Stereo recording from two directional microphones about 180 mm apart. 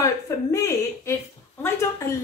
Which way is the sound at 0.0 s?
20° left (ahead or behind).